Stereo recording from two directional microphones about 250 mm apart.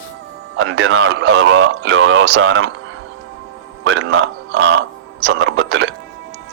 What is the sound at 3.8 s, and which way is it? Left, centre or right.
A man's voice, right.